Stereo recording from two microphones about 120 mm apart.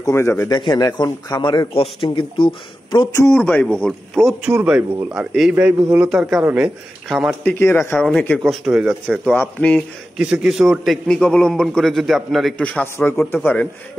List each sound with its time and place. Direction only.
0.0 s speech: 20° left (ahead or behind)
0.5 s a man's voice: 35° left (ahead or behind)
3.2 s a man's voice: 20° left (ahead or behind); by 5.9 s 15° right (ahead or behind)
6.0 s a man's voice: 5° right (ahead or behind)
7.4 s speech: 20° left (ahead or behind)
8.5 s a man's voice: 5° right (ahead or behind); by 9.8 s 10° left (ahead or behind)
10.1 s a man's voice: 5° right (ahead or behind)
12.8 s speech: 20° left (ahead or behind)